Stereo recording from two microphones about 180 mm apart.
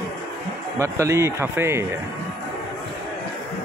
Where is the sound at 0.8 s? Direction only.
15° right (ahead or behind).